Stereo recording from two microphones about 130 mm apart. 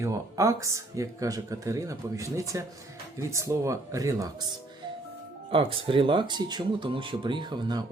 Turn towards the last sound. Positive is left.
turn(degrees=-35)  # may be behind; listen again after turning